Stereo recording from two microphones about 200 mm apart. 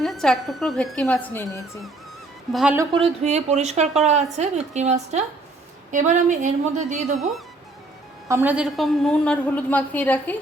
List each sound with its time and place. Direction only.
0.0 s a woman's voice: centre (ahead or behind)
2.5 s a woman's voice: centre (ahead or behind)
2.9 s a woman's voice: 30° right (ahead or behind)
7.2 s a woman's voice: centre (ahead or behind)